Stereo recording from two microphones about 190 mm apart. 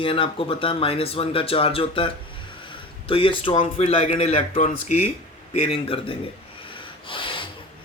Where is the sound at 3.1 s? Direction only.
30° left (ahead or behind).